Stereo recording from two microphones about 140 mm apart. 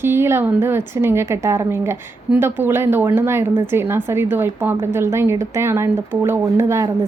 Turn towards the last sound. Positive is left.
turn(degrees=-20)  # may be behind; listen again after turning